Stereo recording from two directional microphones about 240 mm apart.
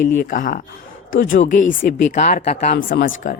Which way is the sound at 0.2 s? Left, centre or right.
Left.